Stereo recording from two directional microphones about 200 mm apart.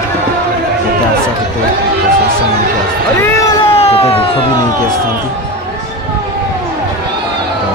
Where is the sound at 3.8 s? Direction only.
30° left (ahead or behind).